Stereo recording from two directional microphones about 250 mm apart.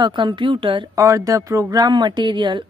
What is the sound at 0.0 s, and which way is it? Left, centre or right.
Speech, centre.